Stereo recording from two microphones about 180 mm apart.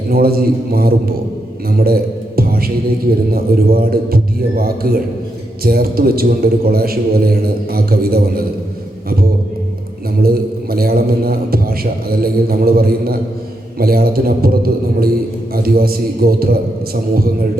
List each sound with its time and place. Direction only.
0.1 s a man's voice: 55° right (ahead or behind)
1.7 s mantra: 55° right (ahead or behind)
3.3 s a man's voice: 55° right (ahead or behind)
10.2 s a man's voice: 55° right (ahead or behind)